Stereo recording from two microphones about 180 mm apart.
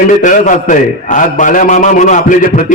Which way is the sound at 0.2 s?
45° left (ahead or behind).